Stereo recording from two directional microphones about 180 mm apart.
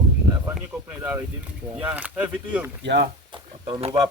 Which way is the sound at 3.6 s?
35° right (ahead or behind).